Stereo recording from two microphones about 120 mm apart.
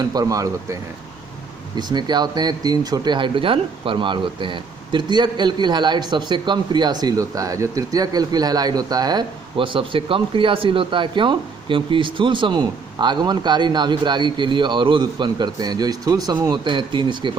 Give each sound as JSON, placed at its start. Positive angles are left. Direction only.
{"t": 0.0, "sound": "speech", "side_deg": -30}